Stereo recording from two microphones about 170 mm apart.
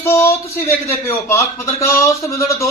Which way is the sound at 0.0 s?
15° left (ahead or behind).